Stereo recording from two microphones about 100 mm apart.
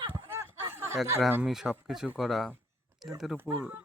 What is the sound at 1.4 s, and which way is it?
Speech, 5° right (ahead or behind).